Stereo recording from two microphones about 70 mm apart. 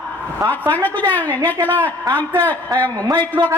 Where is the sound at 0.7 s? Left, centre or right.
Left.